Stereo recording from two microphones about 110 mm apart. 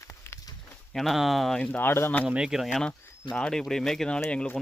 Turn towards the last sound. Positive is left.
turn(degrees=10)  # may be behind; listen again after turning